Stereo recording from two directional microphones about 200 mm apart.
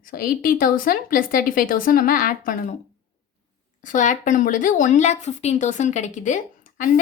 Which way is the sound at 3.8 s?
40° left (ahead or behind).